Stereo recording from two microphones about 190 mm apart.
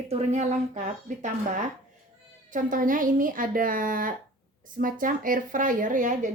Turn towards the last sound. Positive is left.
turn(degrees=-40)  # may be behind; listen again after turning